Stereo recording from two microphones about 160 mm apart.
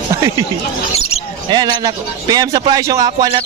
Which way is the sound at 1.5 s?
25° right (ahead or behind).